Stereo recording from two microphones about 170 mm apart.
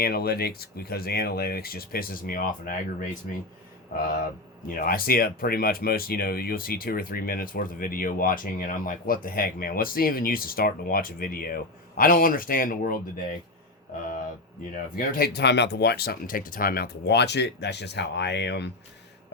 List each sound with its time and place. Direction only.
0.0 s speech: 65° left (ahead or behind)
4.8 s speech: 60° left (ahead or behind)
14.9 s speech: 65° left (ahead or behind); by 18.7 s 85° left